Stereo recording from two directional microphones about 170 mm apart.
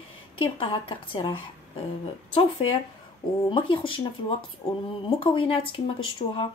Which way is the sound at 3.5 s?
30° left (ahead or behind).